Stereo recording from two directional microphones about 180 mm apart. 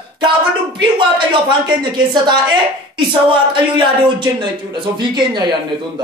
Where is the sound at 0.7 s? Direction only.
25° right (ahead or behind).